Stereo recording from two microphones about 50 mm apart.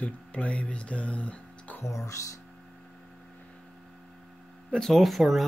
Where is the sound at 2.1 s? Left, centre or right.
Left.